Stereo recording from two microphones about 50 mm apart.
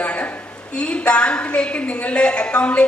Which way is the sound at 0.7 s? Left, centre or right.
Left.